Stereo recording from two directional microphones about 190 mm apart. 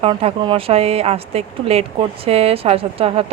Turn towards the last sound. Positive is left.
turn(degrees=-30)  # may be behind; listen again after turning